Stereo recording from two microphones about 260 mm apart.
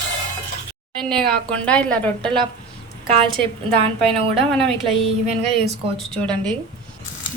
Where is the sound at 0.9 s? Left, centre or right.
Centre.